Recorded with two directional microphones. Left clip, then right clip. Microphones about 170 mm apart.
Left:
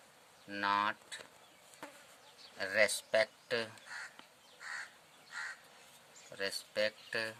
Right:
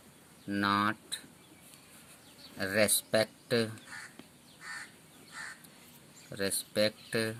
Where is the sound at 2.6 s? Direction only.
40° right (ahead or behind).